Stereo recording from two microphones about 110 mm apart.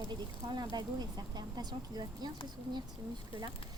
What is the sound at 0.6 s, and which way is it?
Speech, 35° right (ahead or behind).